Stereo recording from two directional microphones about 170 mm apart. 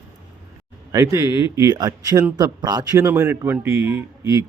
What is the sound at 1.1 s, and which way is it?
Speech, 20° right (ahead or behind).